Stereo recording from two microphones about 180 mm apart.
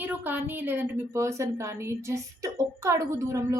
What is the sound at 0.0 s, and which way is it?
A woman's voice, 10° right (ahead or behind).